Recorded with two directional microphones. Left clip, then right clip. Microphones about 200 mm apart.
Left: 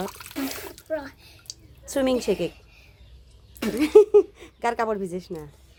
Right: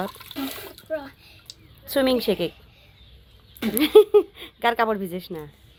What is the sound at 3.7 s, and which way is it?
Speech, centre (ahead or behind).